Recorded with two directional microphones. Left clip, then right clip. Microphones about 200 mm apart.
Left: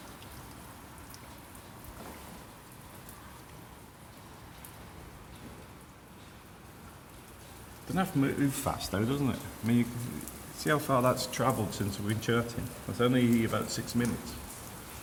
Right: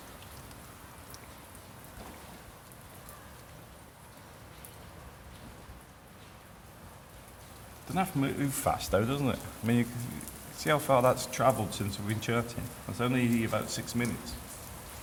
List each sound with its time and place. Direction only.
7.9 s speech: 10° right (ahead or behind)